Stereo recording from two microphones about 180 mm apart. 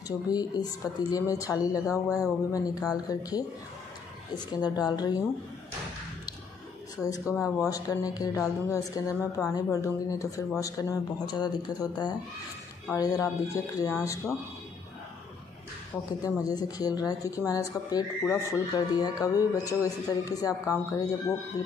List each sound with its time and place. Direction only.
0.3 s speech: 20° left (ahead or behind)
4.5 s speech: 20° left (ahead or behind)
7.0 s a woman's voice: 20° left (ahead or behind)
16.1 s speech: 20° left (ahead or behind)